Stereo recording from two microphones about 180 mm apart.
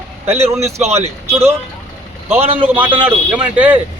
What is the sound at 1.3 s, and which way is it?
Speech, 15° right (ahead or behind).